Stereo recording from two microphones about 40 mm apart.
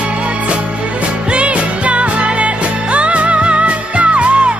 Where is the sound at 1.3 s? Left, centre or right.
Right.